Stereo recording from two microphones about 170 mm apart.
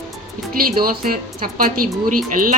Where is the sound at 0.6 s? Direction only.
60° right (ahead or behind).